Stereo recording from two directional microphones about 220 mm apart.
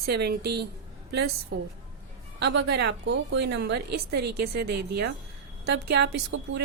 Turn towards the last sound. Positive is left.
turn(degrees=-55)  # may be behind; listen again after turning